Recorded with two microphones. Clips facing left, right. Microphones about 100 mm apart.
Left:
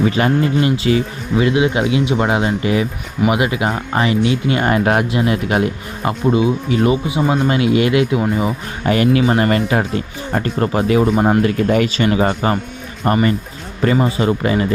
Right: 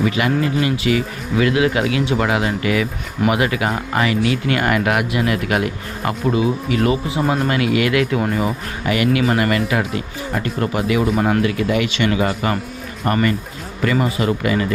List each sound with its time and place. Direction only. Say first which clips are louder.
0.0 s speech: left 3 dB; 30° left (ahead or behind)
7.2 s speech: left 1 dB; centre (ahead or behind)
7.4 s speech: left 3 dB; 25° left (ahead or behind)